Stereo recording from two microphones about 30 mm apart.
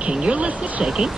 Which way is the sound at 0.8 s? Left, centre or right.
Centre.